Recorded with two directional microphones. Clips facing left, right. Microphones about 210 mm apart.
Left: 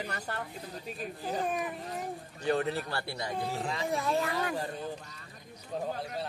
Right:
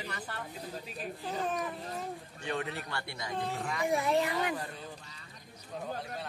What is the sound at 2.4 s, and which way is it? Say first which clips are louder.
A man's voice: left 7 dB; 35° left (ahead or behind).